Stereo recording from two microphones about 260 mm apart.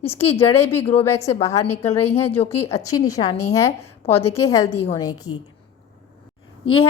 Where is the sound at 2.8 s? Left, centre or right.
Centre.